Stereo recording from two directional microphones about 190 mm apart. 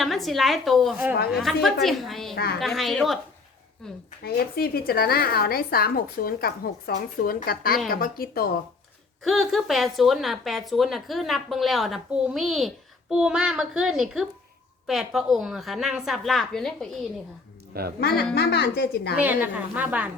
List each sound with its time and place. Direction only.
0.0 s speech: centre (ahead or behind)
2.3 s a woman's voice: 55° left (ahead or behind)
2.6 s speech: centre (ahead or behind)
4.2 s a woman's voice: 55° left (ahead or behind)
9.2 s speech: centre (ahead or behind)
17.7 s speech: 55° right (ahead or behind)
18.3 s a woman's voice: 60° left (ahead or behind)
19.1 s a woman's voice: 10° right (ahead or behind)